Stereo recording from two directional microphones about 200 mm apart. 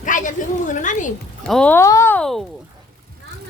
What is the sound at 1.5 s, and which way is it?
Speech, 5° left (ahead or behind).